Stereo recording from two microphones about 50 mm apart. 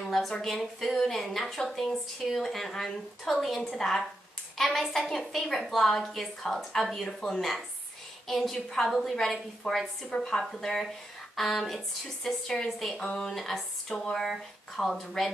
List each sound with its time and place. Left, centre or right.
0.0 s a woman's voice: centre
10.1 s a woman's voice: centre
13.0 s a woman's voice: centre
13.3 s a sound: centre
14.1 s a woman's voice: centre